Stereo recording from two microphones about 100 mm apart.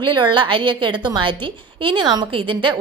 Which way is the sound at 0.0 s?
50° right (ahead or behind).